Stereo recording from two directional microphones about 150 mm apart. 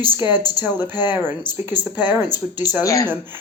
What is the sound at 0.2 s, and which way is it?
Speech, 30° left (ahead or behind).